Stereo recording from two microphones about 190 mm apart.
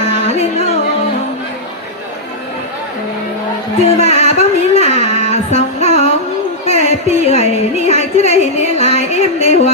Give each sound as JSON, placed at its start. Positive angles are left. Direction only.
{"t": 0.3, "sound": "music", "side_deg": 35}
{"t": 4.0, "sound": "music", "side_deg": 35}